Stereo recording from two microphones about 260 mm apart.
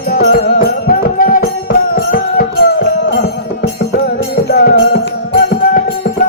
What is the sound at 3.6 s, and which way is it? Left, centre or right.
Music, left.